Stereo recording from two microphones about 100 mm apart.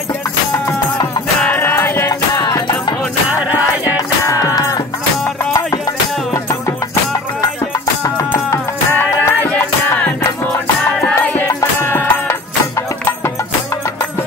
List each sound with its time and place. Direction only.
1.4 s music: 20° left (ahead or behind)
3.8 s music: 35° left (ahead or behind)
8.3 s music: 25° left (ahead or behind)
11.0 s music: 15° left (ahead or behind)